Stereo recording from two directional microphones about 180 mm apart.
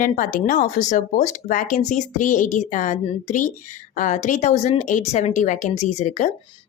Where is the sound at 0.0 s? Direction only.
50° left (ahead or behind).